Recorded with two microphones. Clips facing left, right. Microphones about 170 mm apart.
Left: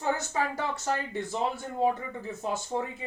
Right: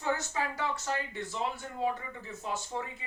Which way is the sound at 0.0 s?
45° left (ahead or behind).